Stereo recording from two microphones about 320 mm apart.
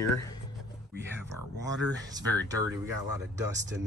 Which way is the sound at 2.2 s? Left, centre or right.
Centre.